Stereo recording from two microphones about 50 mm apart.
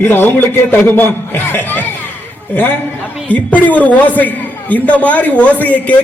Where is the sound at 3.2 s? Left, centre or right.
Left.